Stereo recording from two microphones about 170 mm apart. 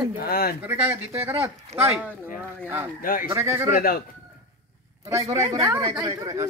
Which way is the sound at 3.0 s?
55° left (ahead or behind).